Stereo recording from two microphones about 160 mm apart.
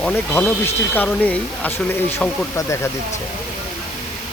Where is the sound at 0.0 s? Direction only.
10° left (ahead or behind).